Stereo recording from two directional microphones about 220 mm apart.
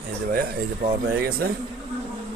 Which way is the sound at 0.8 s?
45° right (ahead or behind).